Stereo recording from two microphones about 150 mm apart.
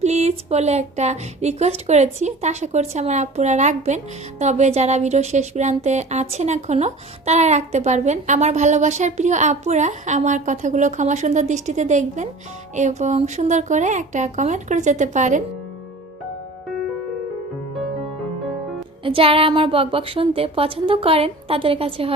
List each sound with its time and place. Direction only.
0.0 s speech: 45° right (ahead or behind)
19.0 s a woman's voice: 35° right (ahead or behind)